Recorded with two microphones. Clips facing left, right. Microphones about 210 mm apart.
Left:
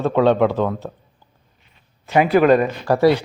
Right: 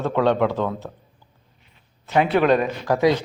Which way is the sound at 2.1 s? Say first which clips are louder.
Left 4 dB; 5° left (ahead or behind).